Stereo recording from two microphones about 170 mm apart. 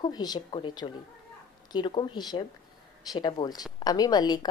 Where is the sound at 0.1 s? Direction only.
25° left (ahead or behind).